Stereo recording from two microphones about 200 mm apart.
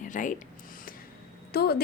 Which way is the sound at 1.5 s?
50° left (ahead or behind).